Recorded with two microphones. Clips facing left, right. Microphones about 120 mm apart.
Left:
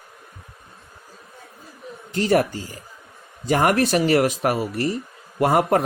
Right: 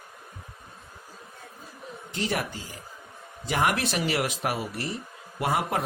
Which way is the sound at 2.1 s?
45° left (ahead or behind).